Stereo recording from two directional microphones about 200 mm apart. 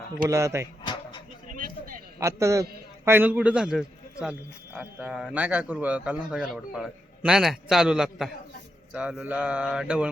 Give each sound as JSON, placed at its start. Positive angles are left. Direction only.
{"t": 0.2, "sound": "speech", "side_deg": -15}
{"t": 1.5, "sound": "a sound", "side_deg": -45}
{"t": 2.1, "sound": "a man's voice", "side_deg": -15}